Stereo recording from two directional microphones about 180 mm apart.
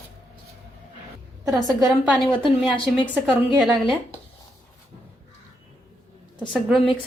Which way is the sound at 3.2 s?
Centre (ahead or behind).